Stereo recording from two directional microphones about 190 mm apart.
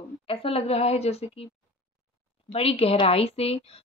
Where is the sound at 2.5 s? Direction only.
30° left (ahead or behind).